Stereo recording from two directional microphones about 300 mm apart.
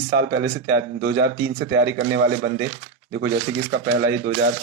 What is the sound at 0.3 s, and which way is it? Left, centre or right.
Speech, right.